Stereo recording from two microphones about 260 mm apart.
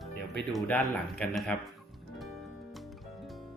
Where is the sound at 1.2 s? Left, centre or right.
Centre.